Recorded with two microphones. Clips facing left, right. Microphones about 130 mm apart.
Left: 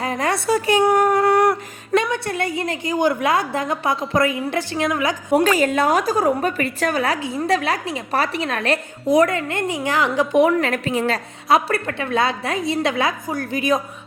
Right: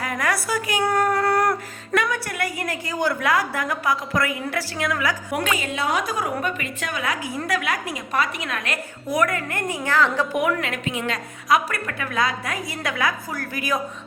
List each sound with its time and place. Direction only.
0.0 s a sound: 25° left (ahead or behind)
2.0 s a woman's voice: 25° left (ahead or behind)
5.4 s a woman's voice: 40° left (ahead or behind); by 10.4 s 15° left (ahead or behind)
10.4 s a woman's voice: 40° left (ahead or behind); by 13.8 s 20° left (ahead or behind)